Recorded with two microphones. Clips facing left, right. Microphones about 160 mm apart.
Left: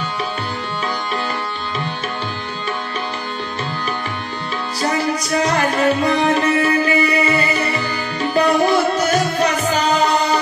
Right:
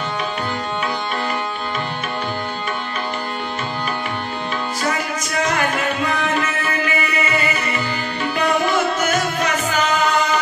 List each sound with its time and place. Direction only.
4.8 s music: 35° left (ahead or behind)